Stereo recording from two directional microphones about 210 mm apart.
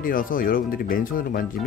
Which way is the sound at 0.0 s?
40° left (ahead or behind).